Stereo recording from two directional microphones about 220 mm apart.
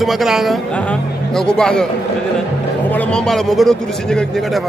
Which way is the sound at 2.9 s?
5° left (ahead or behind).